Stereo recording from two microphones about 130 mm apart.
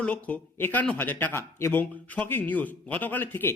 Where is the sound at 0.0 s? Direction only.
10° left (ahead or behind).